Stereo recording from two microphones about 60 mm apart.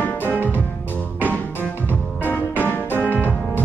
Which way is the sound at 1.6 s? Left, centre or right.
Left.